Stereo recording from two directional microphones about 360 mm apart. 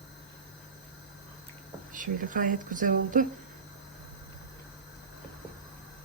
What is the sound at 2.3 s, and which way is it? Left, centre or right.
Speech, right.